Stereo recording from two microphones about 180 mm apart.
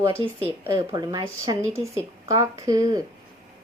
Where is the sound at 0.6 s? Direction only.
15° right (ahead or behind).